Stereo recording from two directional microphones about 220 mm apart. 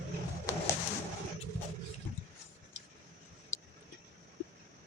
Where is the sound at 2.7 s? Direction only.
30° left (ahead or behind).